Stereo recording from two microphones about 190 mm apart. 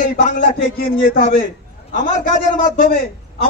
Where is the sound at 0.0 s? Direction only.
40° left (ahead or behind).